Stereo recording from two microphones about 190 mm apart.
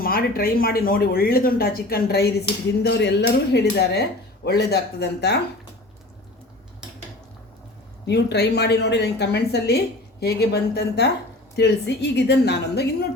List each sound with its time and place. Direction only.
0.0 s speech: 50° left (ahead or behind)
8.0 s speech: 60° left (ahead or behind)